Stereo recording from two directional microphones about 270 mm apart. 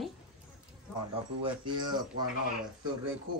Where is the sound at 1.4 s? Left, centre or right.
Centre.